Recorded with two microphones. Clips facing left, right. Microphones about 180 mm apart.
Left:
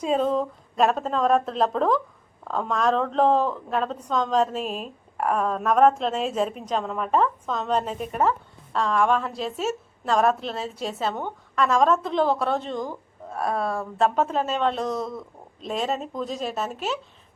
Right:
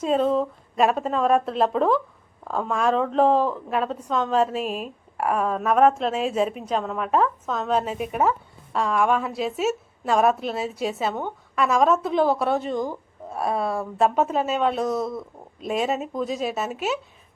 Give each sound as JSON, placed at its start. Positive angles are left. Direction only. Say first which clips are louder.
{"t": 0.0, "sound": "speech", "louder": "right 2 dB", "side_deg": 0}